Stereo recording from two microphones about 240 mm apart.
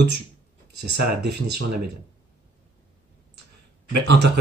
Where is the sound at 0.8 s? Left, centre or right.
Right.